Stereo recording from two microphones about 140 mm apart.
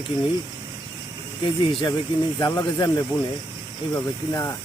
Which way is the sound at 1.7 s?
35° left (ahead or behind).